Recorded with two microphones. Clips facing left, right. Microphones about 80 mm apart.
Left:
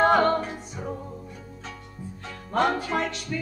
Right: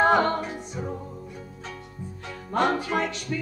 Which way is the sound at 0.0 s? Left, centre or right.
Centre.